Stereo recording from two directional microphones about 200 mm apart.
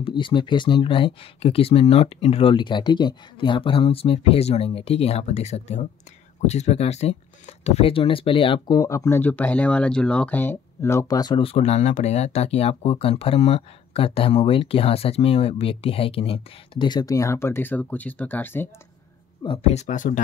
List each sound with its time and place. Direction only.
0.0 s speech: 25° left (ahead or behind)
19.4 s speech: 30° left (ahead or behind)